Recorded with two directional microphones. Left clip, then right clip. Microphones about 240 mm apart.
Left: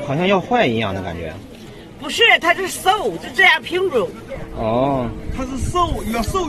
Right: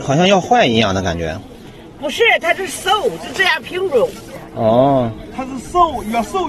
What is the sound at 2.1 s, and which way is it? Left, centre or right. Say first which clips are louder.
Speech: even; centre.